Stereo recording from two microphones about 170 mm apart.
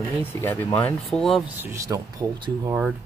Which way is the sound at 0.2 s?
10° left (ahead or behind).